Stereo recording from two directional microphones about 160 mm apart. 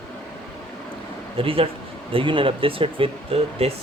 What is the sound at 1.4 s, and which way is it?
Speech, 35° right (ahead or behind).